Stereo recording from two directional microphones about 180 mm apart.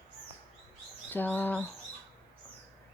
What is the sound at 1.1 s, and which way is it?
Bird, 10° left (ahead or behind).